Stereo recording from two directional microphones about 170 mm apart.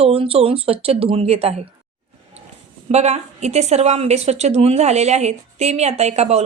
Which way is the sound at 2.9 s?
40° right (ahead or behind).